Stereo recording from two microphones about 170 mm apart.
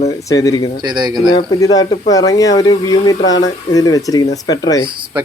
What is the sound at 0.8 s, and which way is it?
Speech, 25° right (ahead or behind).